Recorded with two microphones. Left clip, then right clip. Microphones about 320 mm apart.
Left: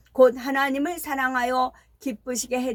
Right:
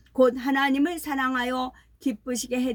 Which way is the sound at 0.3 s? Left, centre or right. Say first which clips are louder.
Even; centre.